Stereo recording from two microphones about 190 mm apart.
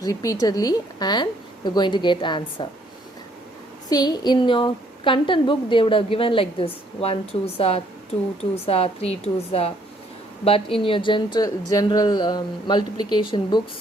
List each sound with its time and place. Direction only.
0.0 s a woman's voice: 20° left (ahead or behind)
3.8 s a woman's voice: 20° left (ahead or behind)